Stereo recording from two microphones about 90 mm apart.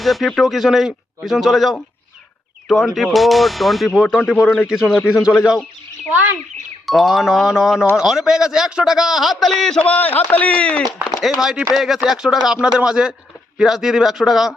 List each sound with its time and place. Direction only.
0.0 s speech: centre (ahead or behind)
6.8 s speech: centre (ahead or behind)
9.8 s a man's voice: 15° left (ahead or behind)
11.2 s speech: 5° right (ahead or behind)